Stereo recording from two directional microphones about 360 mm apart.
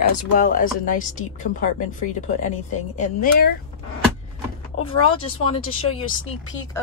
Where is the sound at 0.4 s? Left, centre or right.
Left.